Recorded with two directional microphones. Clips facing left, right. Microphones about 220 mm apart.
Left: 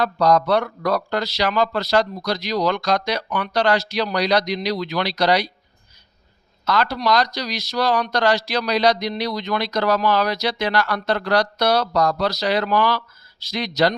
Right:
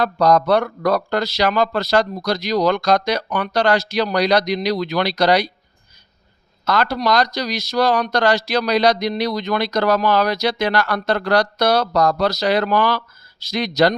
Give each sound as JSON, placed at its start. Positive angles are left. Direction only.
{"t": 0.0, "sound": "speech", "side_deg": -45}
{"t": 6.7, "sound": "speech", "side_deg": -45}